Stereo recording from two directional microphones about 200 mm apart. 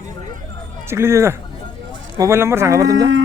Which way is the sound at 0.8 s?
15° right (ahead or behind).